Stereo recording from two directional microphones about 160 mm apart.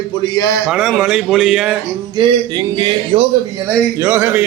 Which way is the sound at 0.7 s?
Centre (ahead or behind).